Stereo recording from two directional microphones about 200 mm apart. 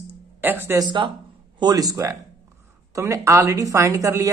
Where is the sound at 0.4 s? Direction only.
10° right (ahead or behind).